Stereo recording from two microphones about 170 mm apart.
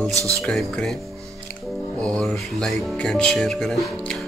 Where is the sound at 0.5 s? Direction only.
Centre (ahead or behind).